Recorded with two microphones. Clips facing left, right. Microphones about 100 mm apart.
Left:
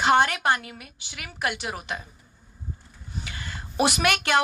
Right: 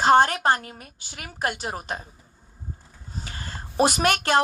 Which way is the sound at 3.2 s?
40° right (ahead or behind).